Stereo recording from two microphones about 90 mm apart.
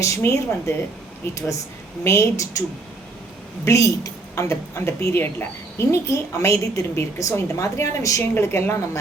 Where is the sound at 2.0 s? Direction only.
30° left (ahead or behind).